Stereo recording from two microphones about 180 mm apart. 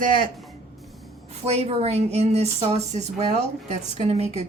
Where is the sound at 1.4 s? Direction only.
35° right (ahead or behind).